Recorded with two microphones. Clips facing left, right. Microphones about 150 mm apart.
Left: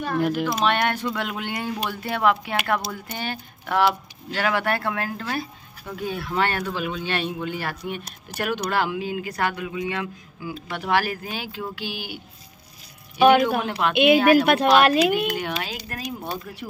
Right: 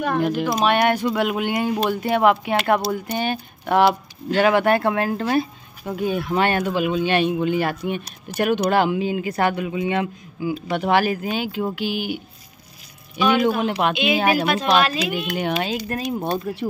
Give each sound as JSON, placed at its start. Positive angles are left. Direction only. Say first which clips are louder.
{"t": 0.2, "sound": "speech", "louder": "right 2 dB", "side_deg": 5}
{"t": 0.7, "sound": "speech", "louder": "right 7 dB", "side_deg": -10}
{"t": 13.6, "sound": "speech", "louder": "right 3 dB", "side_deg": -20}
{"t": 13.9, "sound": "a woman's voice", "louder": "left 4 dB", "side_deg": 55}
{"t": 15.3, "sound": "speech", "louder": "right 6 dB", "side_deg": -20}